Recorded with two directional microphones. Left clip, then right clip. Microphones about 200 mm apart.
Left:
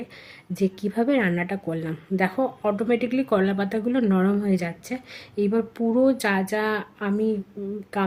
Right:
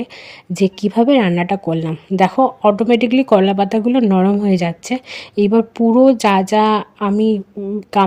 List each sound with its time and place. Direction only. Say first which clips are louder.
0.5 s a woman's voice: right 9 dB; 35° right (ahead or behind)